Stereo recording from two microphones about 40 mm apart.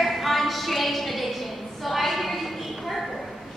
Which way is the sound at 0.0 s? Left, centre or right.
Centre.